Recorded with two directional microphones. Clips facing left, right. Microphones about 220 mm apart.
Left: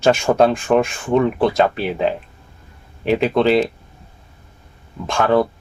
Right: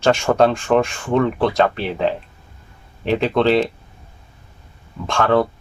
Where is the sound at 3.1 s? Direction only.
5° left (ahead or behind).